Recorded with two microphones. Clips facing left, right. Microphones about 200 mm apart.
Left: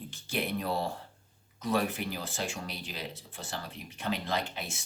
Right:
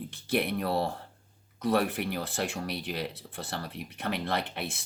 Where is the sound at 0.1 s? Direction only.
60° right (ahead or behind).